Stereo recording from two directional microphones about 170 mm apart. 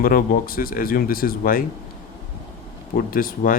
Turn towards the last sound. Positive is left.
turn(degrees=55)  # may be behind; listen again after turning